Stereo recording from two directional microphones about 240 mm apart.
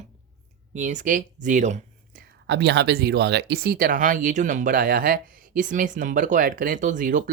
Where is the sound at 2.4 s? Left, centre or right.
Right.